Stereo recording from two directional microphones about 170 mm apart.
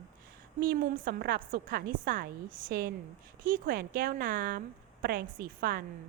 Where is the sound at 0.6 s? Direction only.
60° right (ahead or behind).